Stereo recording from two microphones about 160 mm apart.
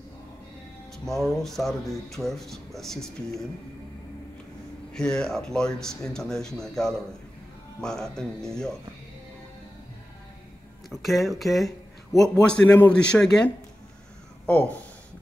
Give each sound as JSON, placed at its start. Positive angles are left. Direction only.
{"t": 0.9, "sound": "speech", "side_deg": 0}
{"t": 4.9, "sound": "speech", "side_deg": 5}
{"t": 10.9, "sound": "a man's voice", "side_deg": 0}